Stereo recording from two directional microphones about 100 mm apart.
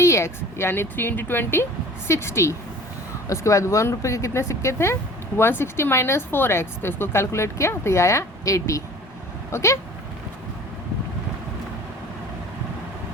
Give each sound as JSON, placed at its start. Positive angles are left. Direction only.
{"t": 0.0, "sound": "a woman's voice", "side_deg": 25}